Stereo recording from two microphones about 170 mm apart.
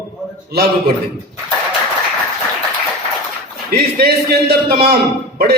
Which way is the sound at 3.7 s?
65° right (ahead or behind).